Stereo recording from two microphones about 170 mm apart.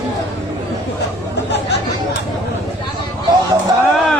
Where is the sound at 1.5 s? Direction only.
80° left.